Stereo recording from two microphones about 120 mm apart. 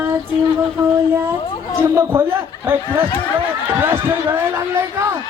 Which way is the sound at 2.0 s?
20° right (ahead or behind).